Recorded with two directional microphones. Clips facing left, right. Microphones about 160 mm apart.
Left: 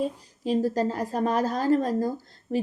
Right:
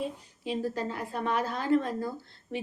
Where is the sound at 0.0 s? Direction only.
40° left (ahead or behind).